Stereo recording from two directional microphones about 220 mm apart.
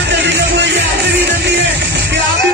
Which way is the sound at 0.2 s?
55° right (ahead or behind).